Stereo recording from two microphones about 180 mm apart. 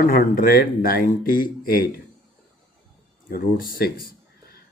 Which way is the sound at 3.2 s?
55° left (ahead or behind).